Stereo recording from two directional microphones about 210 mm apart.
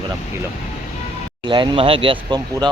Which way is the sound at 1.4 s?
20° right (ahead or behind).